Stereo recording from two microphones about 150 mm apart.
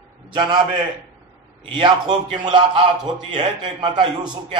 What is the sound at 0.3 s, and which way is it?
Speech, 30° right (ahead or behind).